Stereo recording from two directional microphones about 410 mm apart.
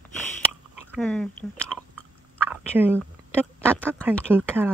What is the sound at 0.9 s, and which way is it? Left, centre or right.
Speech, centre.